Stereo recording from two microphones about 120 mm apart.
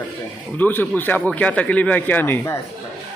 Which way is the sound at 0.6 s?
15° left (ahead or behind).